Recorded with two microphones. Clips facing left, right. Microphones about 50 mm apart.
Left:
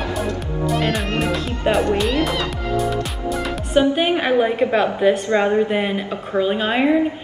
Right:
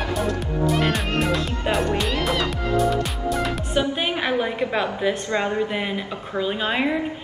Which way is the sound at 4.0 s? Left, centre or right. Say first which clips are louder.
Left 6 dB; centre.